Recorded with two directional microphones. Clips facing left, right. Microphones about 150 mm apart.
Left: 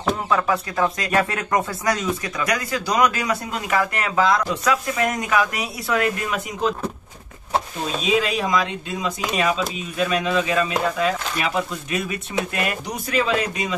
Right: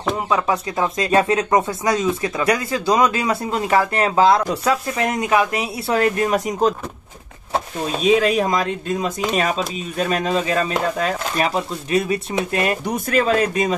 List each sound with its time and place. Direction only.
0.3 s speech: 20° right (ahead or behind); by 6.7 s 40° right (ahead or behind)
8.0 s speech: 50° right (ahead or behind)
12.8 s speech: 50° right (ahead or behind)